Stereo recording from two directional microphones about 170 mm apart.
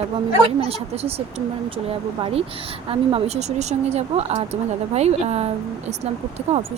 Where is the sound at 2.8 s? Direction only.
35° right (ahead or behind).